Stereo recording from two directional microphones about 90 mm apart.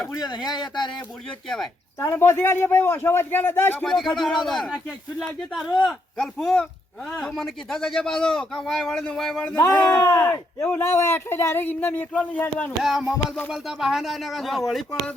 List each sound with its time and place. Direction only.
1.5 s speech: 5° left (ahead or behind)
2.0 s speech: 25° left (ahead or behind)
3.8 s speech: 5° left (ahead or behind)
9.8 s speech: 35° left (ahead or behind); by 12.7 s 15° left (ahead or behind)
12.8 s music: 5° right (ahead or behind)
13.5 s speech: 5° right (ahead or behind)